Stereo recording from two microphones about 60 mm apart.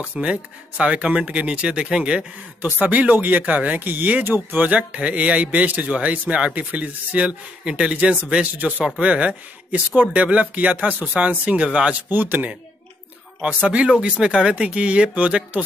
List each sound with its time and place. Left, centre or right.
0.1 s speech: centre
2.6 s speech: right
7.6 s speech: centre
12.1 s speech: right
13.4 s speech: centre